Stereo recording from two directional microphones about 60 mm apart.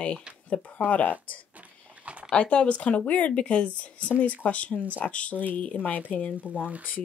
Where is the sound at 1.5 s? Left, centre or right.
Right.